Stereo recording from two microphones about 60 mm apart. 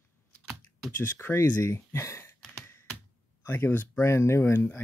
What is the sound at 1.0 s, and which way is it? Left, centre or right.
Speech, left.